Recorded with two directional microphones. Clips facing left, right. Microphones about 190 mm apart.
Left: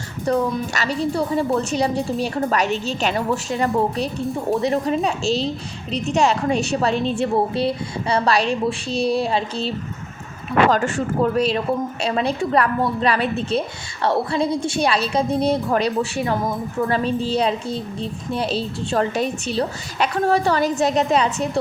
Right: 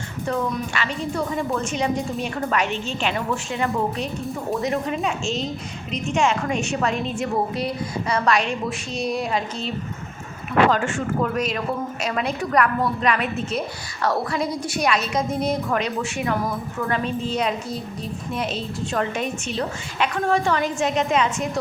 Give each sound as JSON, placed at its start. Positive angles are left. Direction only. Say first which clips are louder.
{"t": 0.3, "sound": "a woman's voice", "louder": "left 5 dB", "side_deg": 40}